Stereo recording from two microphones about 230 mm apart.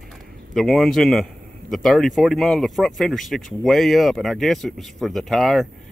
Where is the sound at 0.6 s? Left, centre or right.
Centre.